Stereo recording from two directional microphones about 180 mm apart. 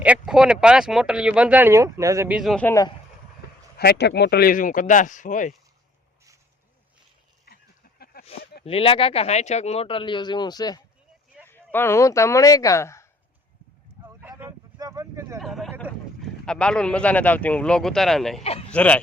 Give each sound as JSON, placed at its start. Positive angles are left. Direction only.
{"t": 0.0, "sound": "speech", "side_deg": -5}
{"t": 2.6, "sound": "speech", "side_deg": 20}
{"t": 3.8, "sound": "speech", "side_deg": 65}
{"t": 7.4, "sound": "a sound", "side_deg": 60}
{"t": 8.6, "sound": "speech", "side_deg": 30}
{"t": 14.0, "sound": "a sound", "side_deg": -10}
{"t": 15.4, "sound": "speech", "side_deg": 0}